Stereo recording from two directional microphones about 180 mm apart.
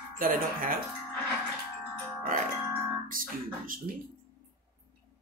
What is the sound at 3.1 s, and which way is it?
Music, 50° right (ahead or behind).